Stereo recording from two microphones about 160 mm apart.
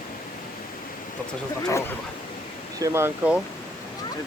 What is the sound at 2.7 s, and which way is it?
Speech, 20° right (ahead or behind).